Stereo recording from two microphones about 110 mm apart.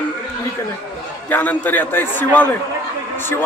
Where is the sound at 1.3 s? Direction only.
15° left (ahead or behind).